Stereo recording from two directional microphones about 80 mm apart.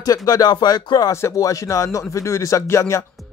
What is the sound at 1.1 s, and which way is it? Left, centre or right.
Speech, left.